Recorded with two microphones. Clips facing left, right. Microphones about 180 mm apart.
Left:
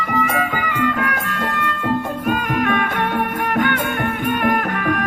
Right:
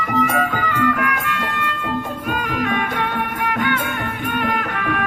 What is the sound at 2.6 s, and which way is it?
Music, 50° left (ahead or behind).